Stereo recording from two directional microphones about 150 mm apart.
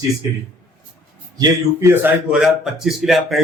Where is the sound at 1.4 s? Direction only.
15° right (ahead or behind).